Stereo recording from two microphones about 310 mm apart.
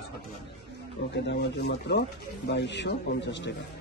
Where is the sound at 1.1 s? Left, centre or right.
Left.